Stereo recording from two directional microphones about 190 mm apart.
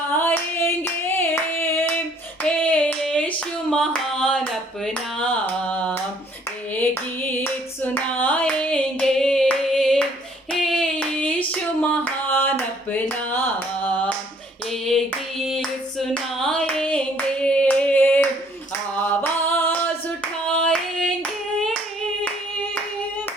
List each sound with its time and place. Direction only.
0.1 s clapping: 10° left (ahead or behind)
5.2 s a sound: 5° left (ahead or behind)
6.7 s clapping: 10° left (ahead or behind)
10.5 s a sound: centre (ahead or behind)
14.7 s hands: centre (ahead or behind)
17.4 s clapping: 5° left (ahead or behind)
19.2 s singing: 10° left (ahead or behind)
20.6 s clapping: 5° left (ahead or behind)